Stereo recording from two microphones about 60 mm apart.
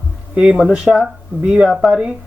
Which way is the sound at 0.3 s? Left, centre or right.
Centre.